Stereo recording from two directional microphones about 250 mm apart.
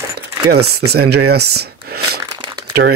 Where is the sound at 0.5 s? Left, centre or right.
Right.